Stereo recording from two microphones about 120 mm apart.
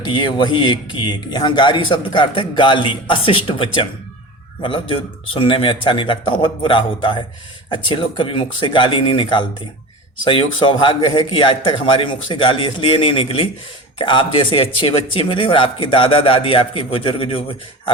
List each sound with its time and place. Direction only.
0.0 s a man's voice: 40° left (ahead or behind)